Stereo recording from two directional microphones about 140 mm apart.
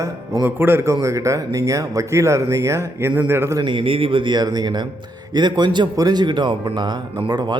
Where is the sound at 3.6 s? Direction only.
35° right (ahead or behind).